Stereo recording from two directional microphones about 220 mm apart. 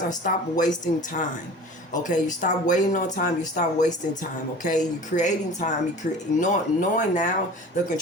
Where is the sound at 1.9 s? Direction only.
35° left (ahead or behind).